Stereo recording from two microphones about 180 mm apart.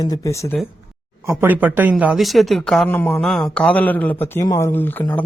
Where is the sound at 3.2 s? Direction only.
5° left (ahead or behind).